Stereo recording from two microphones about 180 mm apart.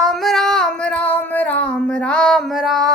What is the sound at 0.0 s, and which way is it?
Female singing, centre (ahead or behind).